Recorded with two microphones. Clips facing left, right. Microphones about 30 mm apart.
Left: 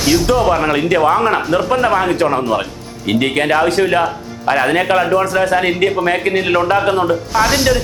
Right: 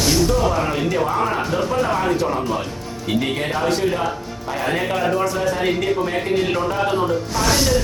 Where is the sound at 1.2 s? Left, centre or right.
Left.